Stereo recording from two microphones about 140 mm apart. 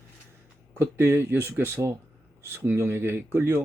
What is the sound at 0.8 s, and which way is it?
Speech, 15° right (ahead or behind).